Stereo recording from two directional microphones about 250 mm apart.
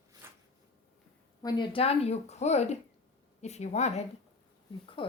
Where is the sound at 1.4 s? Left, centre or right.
Centre.